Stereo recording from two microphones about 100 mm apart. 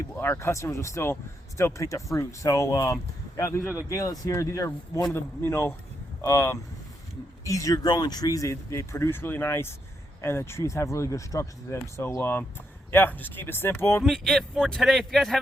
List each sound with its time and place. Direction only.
0.2 s speech: 25° left (ahead or behind)
14.0 s speech: 5° left (ahead or behind)